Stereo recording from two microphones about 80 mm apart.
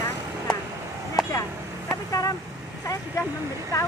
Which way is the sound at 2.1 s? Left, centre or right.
Left.